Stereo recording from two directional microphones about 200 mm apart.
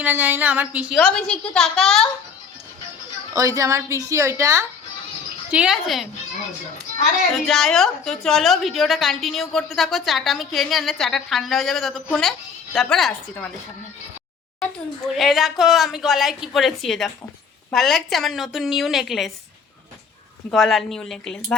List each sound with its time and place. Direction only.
0.0 s a woman's voice: 10° right (ahead or behind)
3.3 s a woman's voice: 15° right (ahead or behind)
7.3 s a woman's voice: centre (ahead or behind)
15.1 s a woman's voice: centre (ahead or behind)
20.5 s a woman's voice: centre (ahead or behind)